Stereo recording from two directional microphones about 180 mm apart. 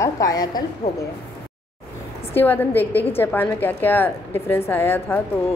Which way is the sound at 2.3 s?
10° left (ahead or behind).